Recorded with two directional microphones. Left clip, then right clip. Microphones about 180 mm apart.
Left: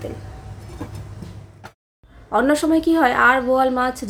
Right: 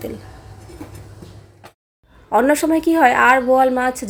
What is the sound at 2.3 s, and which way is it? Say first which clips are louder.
A woman's voice: right 2 dB; 15° right (ahead or behind).